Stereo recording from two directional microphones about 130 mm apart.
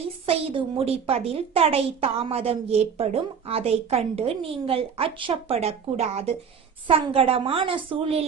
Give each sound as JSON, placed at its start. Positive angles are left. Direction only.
{"t": 0.3, "sound": "a woman's voice", "side_deg": -50}